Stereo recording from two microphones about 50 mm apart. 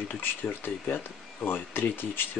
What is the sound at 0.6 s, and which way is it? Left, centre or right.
Speech, left.